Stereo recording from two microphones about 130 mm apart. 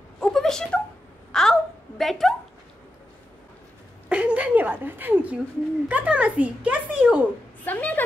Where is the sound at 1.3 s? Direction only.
5° left (ahead or behind).